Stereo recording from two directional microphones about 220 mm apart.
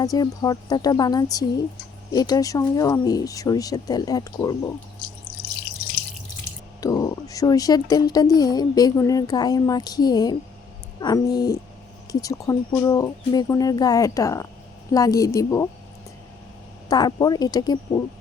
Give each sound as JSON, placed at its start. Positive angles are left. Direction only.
{"t": 0.0, "sound": "speech", "side_deg": 15}
{"t": 6.8, "sound": "speech", "side_deg": 15}
{"t": 16.9, "sound": "speech", "side_deg": 20}